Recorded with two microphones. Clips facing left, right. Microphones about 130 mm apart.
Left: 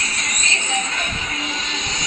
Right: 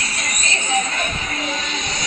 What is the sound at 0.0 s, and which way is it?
Music, 40° right (ahead or behind).